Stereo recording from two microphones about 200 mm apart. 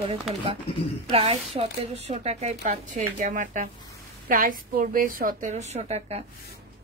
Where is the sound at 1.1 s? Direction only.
30° right (ahead or behind).